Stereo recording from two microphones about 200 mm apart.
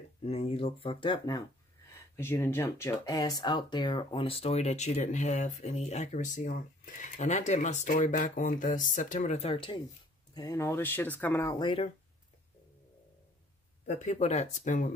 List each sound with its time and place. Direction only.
0.2 s speech: 30° left (ahead or behind)
2.1 s speech: 10° left (ahead or behind); by 9.8 s 30° left (ahead or behind)
10.3 s speech: 15° left (ahead or behind)
13.8 s speech: 35° left (ahead or behind)